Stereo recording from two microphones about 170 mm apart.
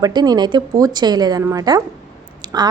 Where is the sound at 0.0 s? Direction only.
25° right (ahead or behind).